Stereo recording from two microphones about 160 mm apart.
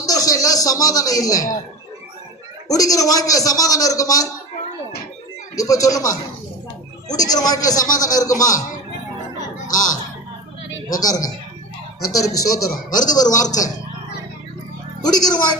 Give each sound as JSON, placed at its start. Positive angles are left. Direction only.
{"t": 0.0, "sound": "a sound", "side_deg": 20}
{"t": 2.6, "sound": "a man's voice", "side_deg": 20}
{"t": 5.5, "sound": "a man's voice", "side_deg": 20}
{"t": 7.1, "sound": "a man's voice", "side_deg": 25}
{"t": 9.6, "sound": "speech", "side_deg": 55}
{"t": 10.8, "sound": "a man's voice", "side_deg": 25}
{"t": 15.0, "sound": "a man's voice", "side_deg": 25}